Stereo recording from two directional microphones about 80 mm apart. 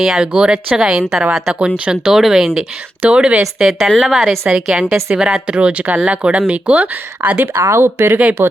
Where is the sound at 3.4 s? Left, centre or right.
Centre.